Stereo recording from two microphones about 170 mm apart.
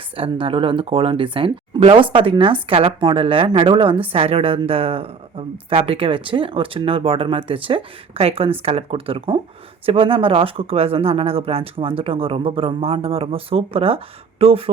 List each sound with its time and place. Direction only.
0.2 s a woman's voice: 30° right (ahead or behind)